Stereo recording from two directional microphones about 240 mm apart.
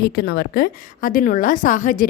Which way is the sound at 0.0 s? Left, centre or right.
Left.